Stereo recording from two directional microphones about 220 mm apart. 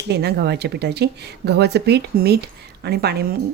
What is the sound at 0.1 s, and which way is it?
Speech, 50° right (ahead or behind).